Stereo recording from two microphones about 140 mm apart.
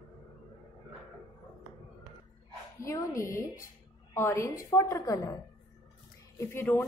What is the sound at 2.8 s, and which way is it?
A woman's voice, 20° left (ahead or behind).